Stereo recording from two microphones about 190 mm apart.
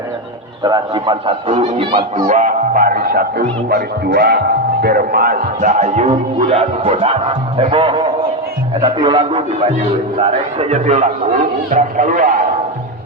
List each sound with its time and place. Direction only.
0.6 s a man's voice: 25° right (ahead or behind)
2.1 s a man's voice: 45° right (ahead or behind)